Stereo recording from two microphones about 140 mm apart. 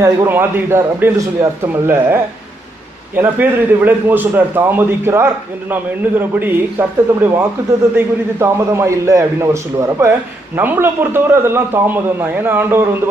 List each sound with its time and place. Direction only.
0.0 s a man's voice: 20° right (ahead or behind)
3.2 s a man's voice: 15° right (ahead or behind)